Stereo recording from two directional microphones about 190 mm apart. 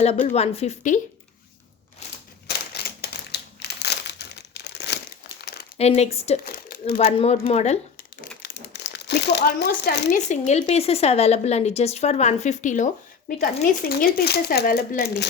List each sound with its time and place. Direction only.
0.0 s speech: 35° left (ahead or behind)
2.5 s crumpling: 55° left (ahead or behind)
5.7 s speech: 35° left (ahead or behind)
6.4 s crumpling: 50° left (ahead or behind)
6.9 s speech: 30° left (ahead or behind)
8.4 s crumpling: 60° left (ahead or behind)
10.2 s speech: 35° left (ahead or behind); by 15.3 s 55° left (ahead or behind)